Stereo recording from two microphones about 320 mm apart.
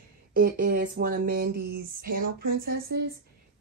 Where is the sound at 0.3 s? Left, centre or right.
Right.